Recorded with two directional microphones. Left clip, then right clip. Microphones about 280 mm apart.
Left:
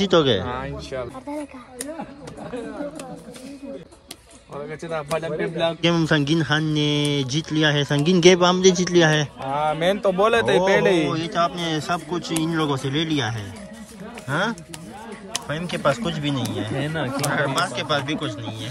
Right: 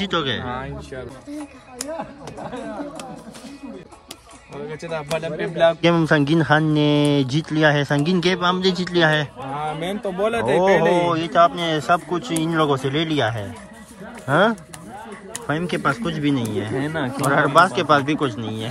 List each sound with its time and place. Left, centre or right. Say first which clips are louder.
0.0 s speech: left 5 dB; centre
4.9 s speech: even; centre
16.8 s speech: right 2 dB; centre
17.1 s speech: right 8 dB; centre